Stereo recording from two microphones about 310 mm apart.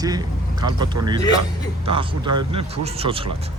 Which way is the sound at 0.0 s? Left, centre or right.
Centre.